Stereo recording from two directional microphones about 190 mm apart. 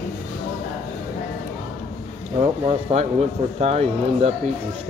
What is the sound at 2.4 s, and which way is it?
Speech, 35° right (ahead or behind).